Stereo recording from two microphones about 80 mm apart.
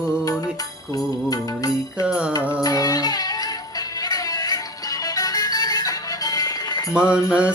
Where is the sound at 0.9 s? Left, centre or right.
Left.